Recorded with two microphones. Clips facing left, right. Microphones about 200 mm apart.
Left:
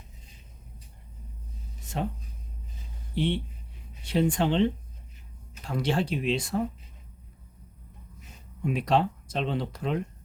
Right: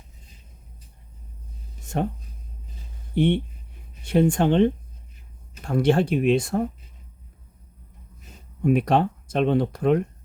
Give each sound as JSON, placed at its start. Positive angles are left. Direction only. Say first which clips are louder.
{"t": 1.8, "sound": "a sound", "louder": "right 6 dB", "side_deg": -50}
{"t": 3.2, "sound": "speech", "louder": "right 7 dB", "side_deg": -55}
{"t": 8.6, "sound": "speech", "louder": "right 5 dB", "side_deg": -55}